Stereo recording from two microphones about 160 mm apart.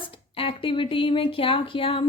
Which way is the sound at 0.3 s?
35° left (ahead or behind).